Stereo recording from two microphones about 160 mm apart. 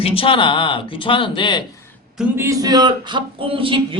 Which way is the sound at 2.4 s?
20° right (ahead or behind).